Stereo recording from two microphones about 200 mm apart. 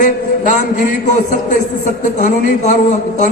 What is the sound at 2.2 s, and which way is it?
A man's voice, 35° left (ahead or behind).